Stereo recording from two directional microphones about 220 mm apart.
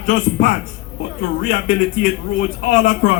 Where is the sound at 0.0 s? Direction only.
35° left (ahead or behind).